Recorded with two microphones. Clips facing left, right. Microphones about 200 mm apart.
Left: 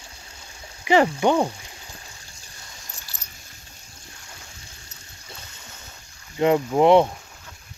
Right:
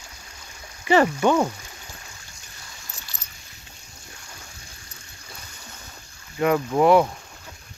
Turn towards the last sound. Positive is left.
turn(degrees=25)  # may be behind; listen again after turning